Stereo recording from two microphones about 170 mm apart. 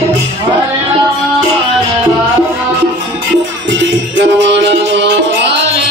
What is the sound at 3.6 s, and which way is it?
Music, 90° right.